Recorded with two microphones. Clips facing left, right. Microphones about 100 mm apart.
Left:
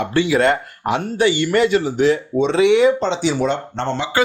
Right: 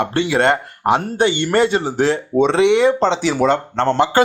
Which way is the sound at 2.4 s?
60° right (ahead or behind).